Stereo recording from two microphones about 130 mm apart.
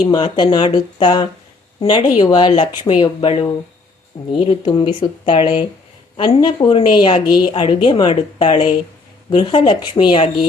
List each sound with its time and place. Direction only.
0.0 s a woman's voice: 35° left (ahead or behind)